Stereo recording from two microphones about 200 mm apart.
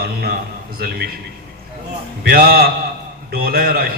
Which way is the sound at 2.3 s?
50° right (ahead or behind).